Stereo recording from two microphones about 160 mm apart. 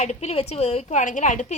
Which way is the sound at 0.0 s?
45° left (ahead or behind).